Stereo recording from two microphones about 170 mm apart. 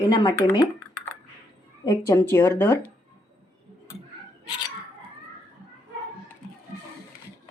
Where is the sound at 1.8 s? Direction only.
20° left (ahead or behind).